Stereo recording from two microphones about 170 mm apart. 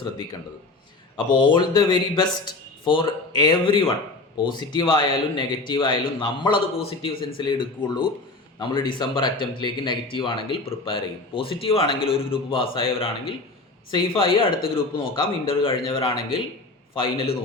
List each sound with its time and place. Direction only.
1.4 s speech: 25° left (ahead or behind)